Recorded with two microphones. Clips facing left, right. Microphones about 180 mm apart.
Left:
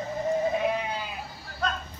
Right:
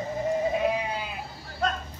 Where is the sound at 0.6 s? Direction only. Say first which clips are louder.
Right 1 dB; 5° right (ahead or behind).